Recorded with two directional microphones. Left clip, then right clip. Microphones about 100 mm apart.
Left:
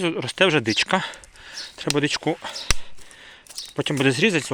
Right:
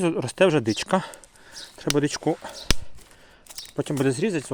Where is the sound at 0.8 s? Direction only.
40° right (ahead or behind).